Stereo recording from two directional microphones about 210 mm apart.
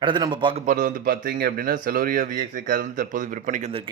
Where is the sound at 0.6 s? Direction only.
40° right (ahead or behind).